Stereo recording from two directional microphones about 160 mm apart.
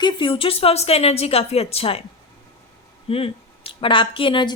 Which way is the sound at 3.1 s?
35° left (ahead or behind).